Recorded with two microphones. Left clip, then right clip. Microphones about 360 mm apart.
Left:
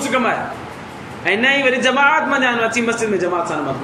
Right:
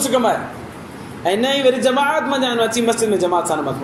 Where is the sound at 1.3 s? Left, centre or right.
Centre.